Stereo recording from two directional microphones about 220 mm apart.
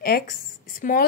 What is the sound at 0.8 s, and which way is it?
Speech, 40° left (ahead or behind).